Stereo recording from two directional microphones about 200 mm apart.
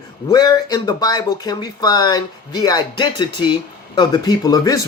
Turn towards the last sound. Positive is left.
turn(degrees=20)  # may be behind; listen again after turning